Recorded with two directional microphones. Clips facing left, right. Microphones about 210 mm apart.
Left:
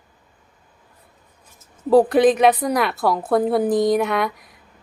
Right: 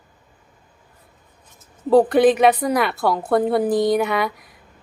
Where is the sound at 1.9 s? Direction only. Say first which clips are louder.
Even; centre (ahead or behind).